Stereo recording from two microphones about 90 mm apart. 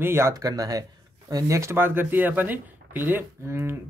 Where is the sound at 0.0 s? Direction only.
25° right (ahead or behind).